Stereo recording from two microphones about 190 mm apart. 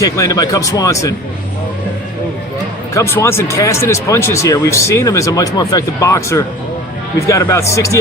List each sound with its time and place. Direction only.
0.0 s speech: 20° left (ahead or behind)
2.9 s speech: 15° left (ahead or behind)